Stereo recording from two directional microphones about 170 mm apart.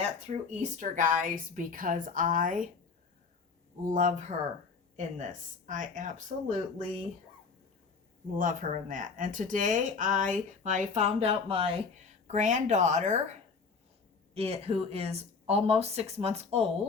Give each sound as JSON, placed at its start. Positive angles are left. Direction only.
{"t": 0.3, "sound": "speech", "side_deg": -45}
{"t": 3.8, "sound": "speech", "side_deg": -50}
{"t": 8.4, "sound": "speech", "side_deg": -50}
{"t": 14.3, "sound": "speech", "side_deg": -35}